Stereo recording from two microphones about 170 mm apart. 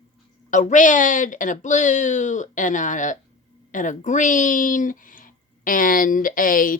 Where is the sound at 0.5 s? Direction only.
45° left (ahead or behind).